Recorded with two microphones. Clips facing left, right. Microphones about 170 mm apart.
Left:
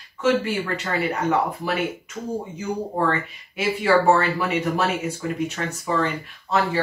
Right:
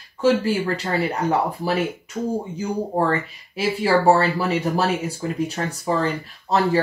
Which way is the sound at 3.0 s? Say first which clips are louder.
Right 2 dB; 30° right (ahead or behind).